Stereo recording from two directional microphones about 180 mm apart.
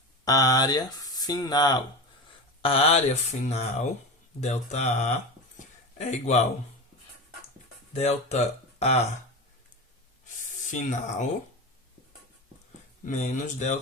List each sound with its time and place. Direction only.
0.3 s speech: 20° left (ahead or behind); by 5.1 s 40° left (ahead or behind)
5.5 s a sound: 40° left (ahead or behind)
7.9 s speech: 35° left (ahead or behind)
10.7 s speech: 40° left (ahead or behind)
13.1 s speech: 40° left (ahead or behind)